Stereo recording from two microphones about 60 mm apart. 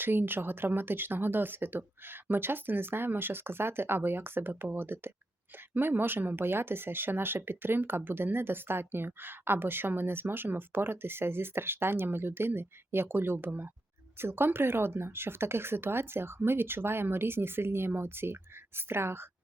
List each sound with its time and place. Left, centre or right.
0.0 s speech: right